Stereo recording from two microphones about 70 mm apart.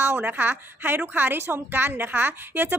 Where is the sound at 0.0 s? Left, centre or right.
Right.